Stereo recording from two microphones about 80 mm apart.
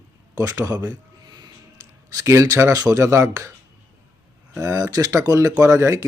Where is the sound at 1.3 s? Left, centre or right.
Right.